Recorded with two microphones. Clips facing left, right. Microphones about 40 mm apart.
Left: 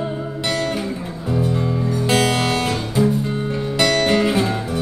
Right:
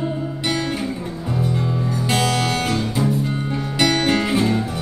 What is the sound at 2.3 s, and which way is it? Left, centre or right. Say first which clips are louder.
Guitar: left 1 dB; centre.